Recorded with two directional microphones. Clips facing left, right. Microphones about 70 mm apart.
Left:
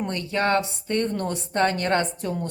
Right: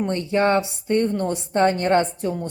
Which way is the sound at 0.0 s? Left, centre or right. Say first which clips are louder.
Right 5 dB; right.